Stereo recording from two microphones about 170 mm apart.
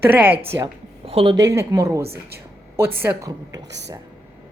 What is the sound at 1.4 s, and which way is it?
A woman's voice, 20° right (ahead or behind).